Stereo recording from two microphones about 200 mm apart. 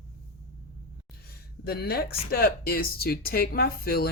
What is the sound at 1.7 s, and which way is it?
Speech, 50° left (ahead or behind).